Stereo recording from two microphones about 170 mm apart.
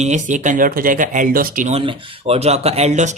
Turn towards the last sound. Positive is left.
turn(degrees=-40)  # may be behind; listen again after turning